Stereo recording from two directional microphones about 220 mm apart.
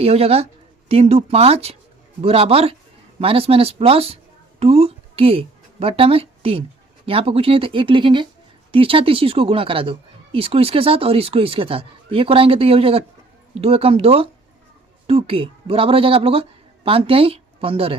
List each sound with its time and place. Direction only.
0.0 s a woman's voice: 25° right (ahead or behind)